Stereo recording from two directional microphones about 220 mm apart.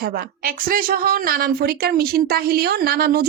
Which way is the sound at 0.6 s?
40° right (ahead or behind).